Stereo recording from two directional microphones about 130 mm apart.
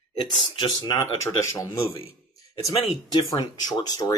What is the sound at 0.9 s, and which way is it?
Speech, 20° left (ahead or behind).